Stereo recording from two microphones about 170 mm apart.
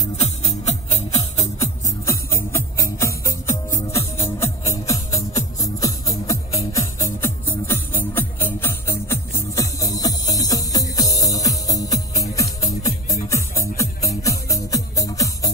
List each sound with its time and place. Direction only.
0.2 s music: 35° left (ahead or behind)
1.4 s music: 20° left (ahead or behind)